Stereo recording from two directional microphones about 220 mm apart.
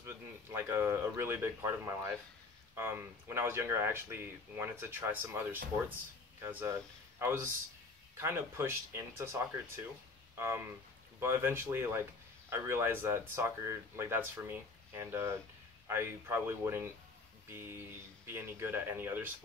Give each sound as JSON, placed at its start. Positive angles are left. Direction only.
{"t": 0.0, "sound": "speech", "side_deg": -10}